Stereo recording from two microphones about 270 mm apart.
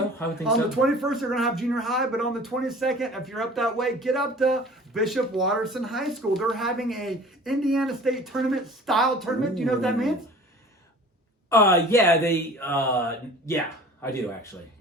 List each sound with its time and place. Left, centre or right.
0.4 s speech: centre
11.4 s speech: centre